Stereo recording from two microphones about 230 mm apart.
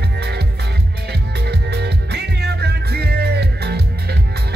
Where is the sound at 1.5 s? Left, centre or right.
Right.